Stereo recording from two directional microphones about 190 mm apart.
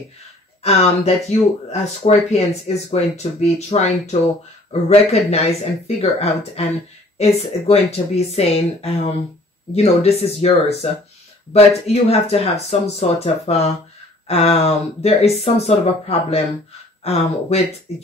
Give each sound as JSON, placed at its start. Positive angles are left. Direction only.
{"t": 0.6, "sound": "speech", "side_deg": 35}